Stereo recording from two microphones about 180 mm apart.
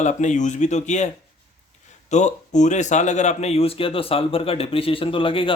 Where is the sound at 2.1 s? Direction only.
40° left (ahead or behind).